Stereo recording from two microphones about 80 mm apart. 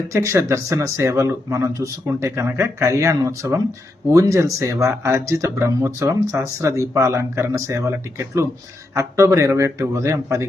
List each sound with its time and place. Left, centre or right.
0.1 s speech: right